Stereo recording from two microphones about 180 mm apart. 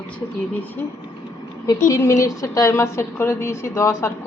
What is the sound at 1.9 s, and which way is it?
A woman's voice, 15° left (ahead or behind).